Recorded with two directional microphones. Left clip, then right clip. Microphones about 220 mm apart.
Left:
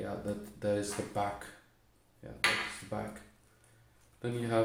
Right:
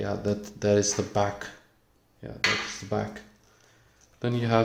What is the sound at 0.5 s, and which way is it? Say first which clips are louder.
Speech: right 10 dB; 45° right (ahead or behind).